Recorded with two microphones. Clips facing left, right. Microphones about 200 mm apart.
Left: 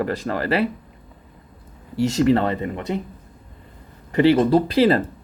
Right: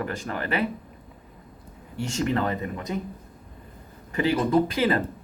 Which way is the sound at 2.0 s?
35° left (ahead or behind).